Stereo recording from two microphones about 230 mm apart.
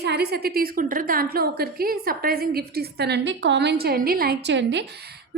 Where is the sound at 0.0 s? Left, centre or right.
Right.